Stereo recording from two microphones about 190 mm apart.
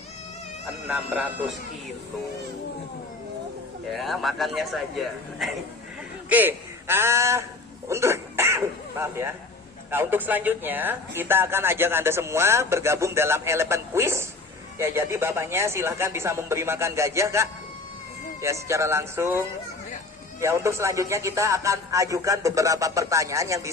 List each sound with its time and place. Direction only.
0.9 s speech: 5° right (ahead or behind)
3.9 s a man's voice: centre (ahead or behind); by 23.7 s 15° right (ahead or behind)